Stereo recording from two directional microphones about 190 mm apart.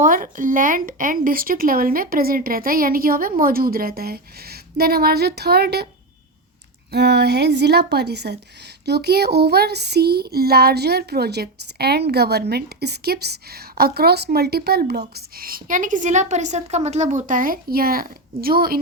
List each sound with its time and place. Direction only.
0.0 s a woman's voice: 45° right (ahead or behind)
6.9 s speech: 60° right (ahead or behind)